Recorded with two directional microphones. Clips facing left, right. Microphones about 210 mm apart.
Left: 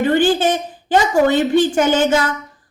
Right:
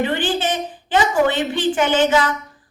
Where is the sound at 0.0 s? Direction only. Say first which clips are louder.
Left 6 dB; 45° left (ahead or behind).